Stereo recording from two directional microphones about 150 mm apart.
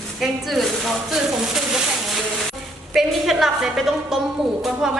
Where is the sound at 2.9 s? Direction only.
Centre (ahead or behind).